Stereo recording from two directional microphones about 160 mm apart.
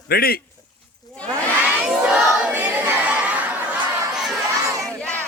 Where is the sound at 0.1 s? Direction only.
70° left (ahead or behind).